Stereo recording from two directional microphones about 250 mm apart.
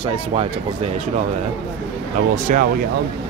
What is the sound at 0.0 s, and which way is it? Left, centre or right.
Speech, right.